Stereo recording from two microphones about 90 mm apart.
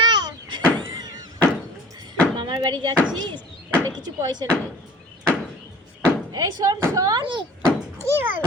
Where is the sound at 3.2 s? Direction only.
60° right (ahead or behind).